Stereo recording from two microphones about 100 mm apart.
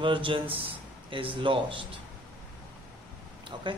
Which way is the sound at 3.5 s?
50° right (ahead or behind).